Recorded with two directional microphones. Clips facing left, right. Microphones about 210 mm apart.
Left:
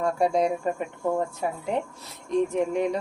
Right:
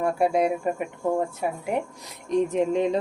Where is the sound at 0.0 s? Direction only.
5° right (ahead or behind).